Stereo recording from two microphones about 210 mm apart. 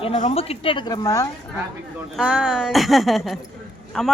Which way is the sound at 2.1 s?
5° right (ahead or behind).